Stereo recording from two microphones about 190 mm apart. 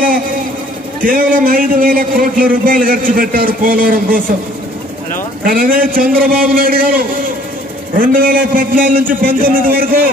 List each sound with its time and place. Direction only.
1.0 s a man's voice: 45° right (ahead or behind)
5.4 s a man's voice: 50° right (ahead or behind)